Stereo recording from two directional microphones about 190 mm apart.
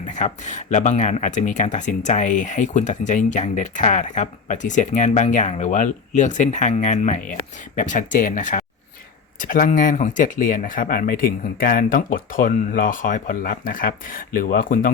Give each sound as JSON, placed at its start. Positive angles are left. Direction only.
{"t": 0.1, "sound": "speech", "side_deg": 40}